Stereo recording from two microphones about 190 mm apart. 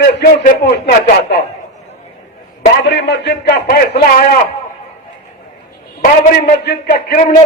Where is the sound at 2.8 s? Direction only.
65° left (ahead or behind).